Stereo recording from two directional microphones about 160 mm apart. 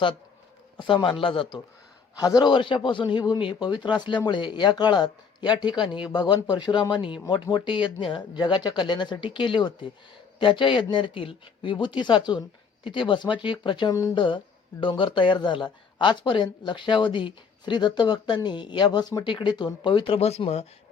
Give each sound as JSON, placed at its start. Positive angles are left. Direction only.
{"t": 1.2, "sound": "speech", "side_deg": 30}